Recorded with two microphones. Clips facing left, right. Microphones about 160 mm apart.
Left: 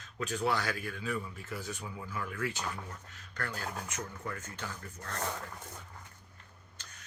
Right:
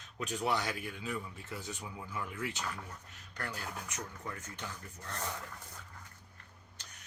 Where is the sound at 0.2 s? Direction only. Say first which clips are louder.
Left 2 dB; 20° right (ahead or behind).